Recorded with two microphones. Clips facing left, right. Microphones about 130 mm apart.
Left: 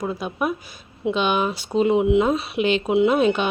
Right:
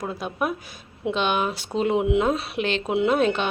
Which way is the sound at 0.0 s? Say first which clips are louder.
Left 2 dB; centre (ahead or behind).